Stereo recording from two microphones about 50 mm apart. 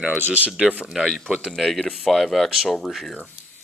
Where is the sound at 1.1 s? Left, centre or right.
Centre.